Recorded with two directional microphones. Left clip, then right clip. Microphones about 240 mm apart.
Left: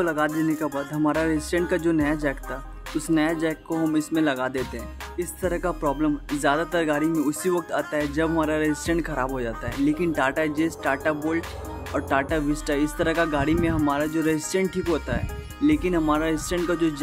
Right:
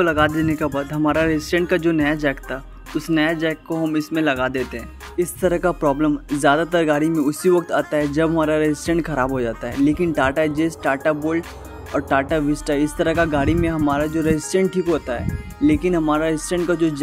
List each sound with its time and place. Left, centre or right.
0.0 s speech: centre
3.7 s speech: centre